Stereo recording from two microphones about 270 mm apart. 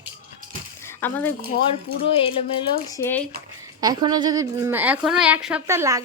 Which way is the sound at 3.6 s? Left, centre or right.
Centre.